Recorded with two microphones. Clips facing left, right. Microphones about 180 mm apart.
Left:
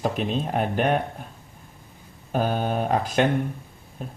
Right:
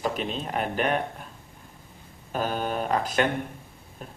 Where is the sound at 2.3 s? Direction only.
45° left (ahead or behind).